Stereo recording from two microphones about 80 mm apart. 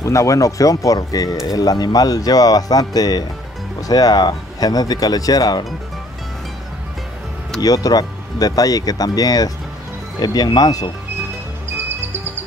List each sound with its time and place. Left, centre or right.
0.0 s speech: left
7.6 s speech: left